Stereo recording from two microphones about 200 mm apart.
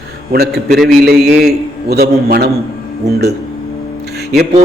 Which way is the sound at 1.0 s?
50° right (ahead or behind).